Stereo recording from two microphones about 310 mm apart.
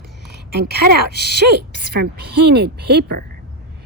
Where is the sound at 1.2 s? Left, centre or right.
Right.